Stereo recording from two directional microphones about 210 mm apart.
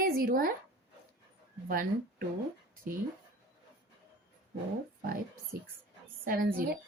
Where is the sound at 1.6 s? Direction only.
45° right (ahead or behind).